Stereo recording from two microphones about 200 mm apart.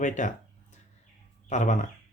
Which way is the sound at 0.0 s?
40° left (ahead or behind).